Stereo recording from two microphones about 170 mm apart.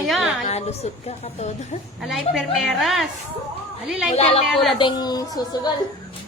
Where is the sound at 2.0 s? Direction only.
Centre (ahead or behind).